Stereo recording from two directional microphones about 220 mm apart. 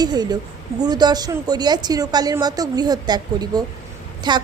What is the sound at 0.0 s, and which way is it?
A woman's voice, 20° right (ahead or behind).